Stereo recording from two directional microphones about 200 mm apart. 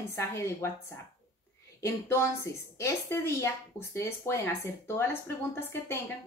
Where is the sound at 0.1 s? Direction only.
15° left (ahead or behind).